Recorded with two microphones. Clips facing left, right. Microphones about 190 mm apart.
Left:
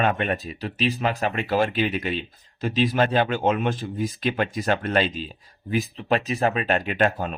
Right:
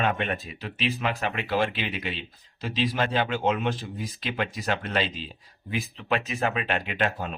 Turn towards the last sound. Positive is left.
turn(degrees=45)  # may be behind; listen again after turning